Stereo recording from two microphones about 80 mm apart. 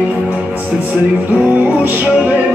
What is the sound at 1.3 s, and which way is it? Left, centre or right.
Music, centre.